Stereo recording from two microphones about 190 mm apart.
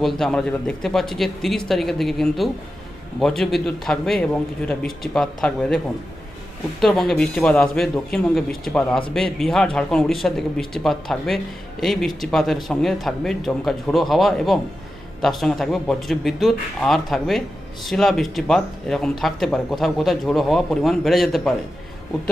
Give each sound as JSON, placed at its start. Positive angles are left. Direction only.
{"t": 0.0, "sound": "speech", "side_deg": 0}
{"t": 6.8, "sound": "speech", "side_deg": 0}